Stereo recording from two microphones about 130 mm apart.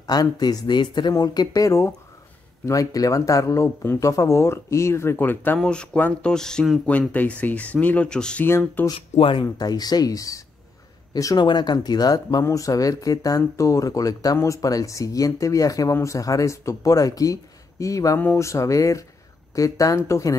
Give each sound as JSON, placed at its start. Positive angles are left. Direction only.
{"t": 0.0, "sound": "speech", "side_deg": 30}
{"t": 8.5, "sound": "speech", "side_deg": 20}
{"t": 9.1, "sound": "speech", "side_deg": 40}